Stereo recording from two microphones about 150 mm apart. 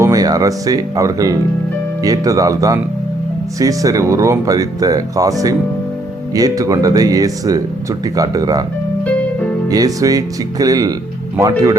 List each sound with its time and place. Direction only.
0.0 s speech: 25° right (ahead or behind)
9.6 s speech: 25° right (ahead or behind)